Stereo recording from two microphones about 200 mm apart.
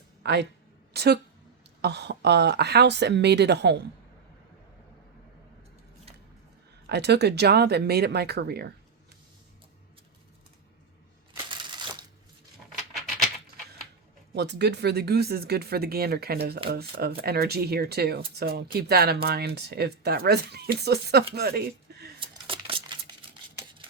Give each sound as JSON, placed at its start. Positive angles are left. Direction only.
{"t": 0.2, "sound": "a man's voice", "side_deg": -60}
{"t": 6.8, "sound": "speech", "side_deg": -55}
{"t": 11.4, "sound": "crushing", "side_deg": -25}
{"t": 14.3, "sound": "speech", "side_deg": -55}
{"t": 22.2, "sound": "a sound", "side_deg": -25}